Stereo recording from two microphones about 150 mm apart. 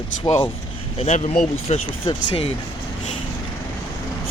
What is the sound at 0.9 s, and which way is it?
Speech, 45° left (ahead or behind).